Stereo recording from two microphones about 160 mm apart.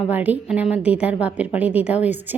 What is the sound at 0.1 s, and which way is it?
A woman's voice, 10° right (ahead or behind).